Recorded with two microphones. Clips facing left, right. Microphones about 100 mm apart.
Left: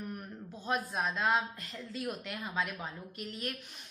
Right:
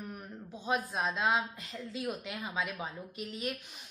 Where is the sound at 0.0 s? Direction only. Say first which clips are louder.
Left 2 dB; centre (ahead or behind).